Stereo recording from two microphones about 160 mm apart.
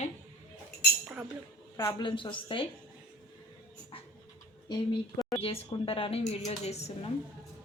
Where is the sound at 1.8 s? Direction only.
25° left (ahead or behind).